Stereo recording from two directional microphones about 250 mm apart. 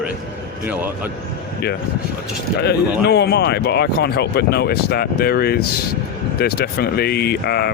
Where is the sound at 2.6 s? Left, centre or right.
Left.